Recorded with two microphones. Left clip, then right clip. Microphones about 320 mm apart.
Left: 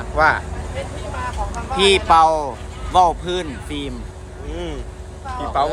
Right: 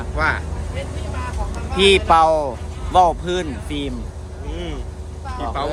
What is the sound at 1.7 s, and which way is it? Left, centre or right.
Speech, centre.